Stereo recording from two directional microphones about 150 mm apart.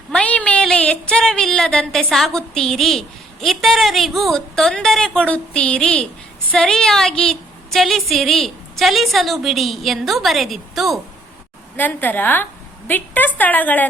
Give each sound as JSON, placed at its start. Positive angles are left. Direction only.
{"t": 0.1, "sound": "a sound", "side_deg": 5}
{"t": 3.4, "sound": "a woman's voice", "side_deg": 0}
{"t": 11.8, "sound": "a woman's voice", "side_deg": 10}